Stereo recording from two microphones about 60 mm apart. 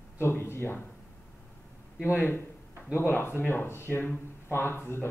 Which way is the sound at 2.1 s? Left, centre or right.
Left.